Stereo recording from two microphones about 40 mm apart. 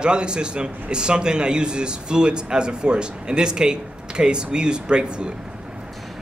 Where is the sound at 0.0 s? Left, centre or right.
Right.